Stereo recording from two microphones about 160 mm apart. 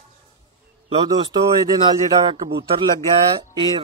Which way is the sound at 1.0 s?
25° right (ahead or behind).